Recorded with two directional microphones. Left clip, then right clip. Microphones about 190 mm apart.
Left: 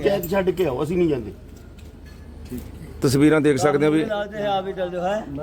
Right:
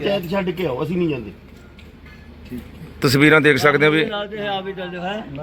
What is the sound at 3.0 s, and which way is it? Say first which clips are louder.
A man's voice: right 4 dB; centre (ahead or behind).